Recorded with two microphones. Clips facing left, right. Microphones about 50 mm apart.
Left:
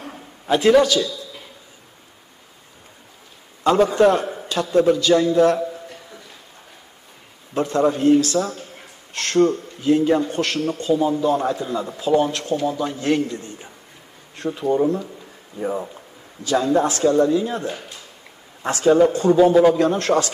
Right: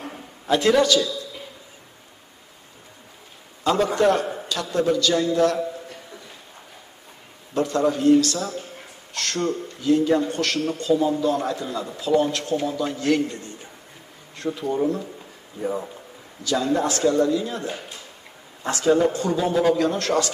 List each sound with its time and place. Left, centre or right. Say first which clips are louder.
0.6 s a man's voice: left 3 dB; centre
3.6 s a man's voice: left 5 dB; left
4.1 s a sound: left 1 dB; left
4.8 s speech: left 4 dB; left
7.5 s speech: left 2 dB; left
14.4 s speech: left 2 dB; left
14.7 s speech: left 5 dB; left
16.4 s a man's voice: left 4 dB; left